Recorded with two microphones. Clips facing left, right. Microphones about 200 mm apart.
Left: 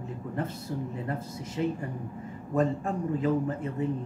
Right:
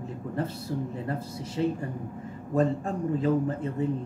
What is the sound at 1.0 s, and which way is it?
Speech, 35° right (ahead or behind).